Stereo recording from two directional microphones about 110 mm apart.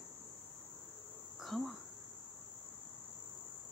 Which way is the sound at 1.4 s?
Centre (ahead or behind).